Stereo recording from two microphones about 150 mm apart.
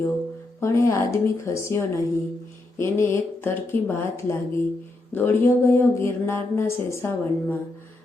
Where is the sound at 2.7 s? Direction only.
15° left (ahead or behind).